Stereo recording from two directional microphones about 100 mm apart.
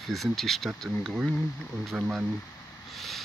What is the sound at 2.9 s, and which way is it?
Vehicle, centre (ahead or behind).